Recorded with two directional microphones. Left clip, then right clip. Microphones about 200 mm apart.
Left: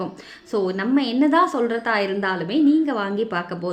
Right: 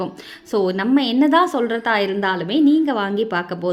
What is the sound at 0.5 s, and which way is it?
A woman's voice, 35° right (ahead or behind).